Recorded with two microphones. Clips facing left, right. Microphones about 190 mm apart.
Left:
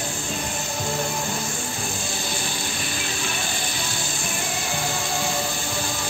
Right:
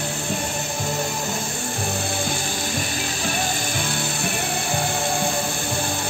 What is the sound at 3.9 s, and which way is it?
Music, 60° right (ahead or behind).